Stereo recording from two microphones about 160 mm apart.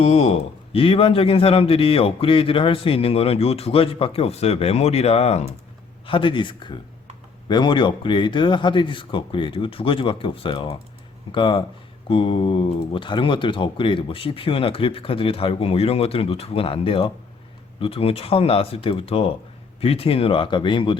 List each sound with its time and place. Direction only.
0.0 s a man's voice: 40° left (ahead or behind)